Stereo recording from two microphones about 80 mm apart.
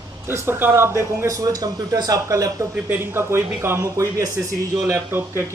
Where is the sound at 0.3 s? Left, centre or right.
Right.